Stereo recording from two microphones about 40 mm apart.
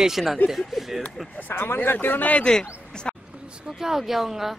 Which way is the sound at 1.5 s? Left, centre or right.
Left.